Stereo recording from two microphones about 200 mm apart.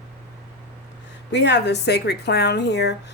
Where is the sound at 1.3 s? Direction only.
60° left (ahead or behind).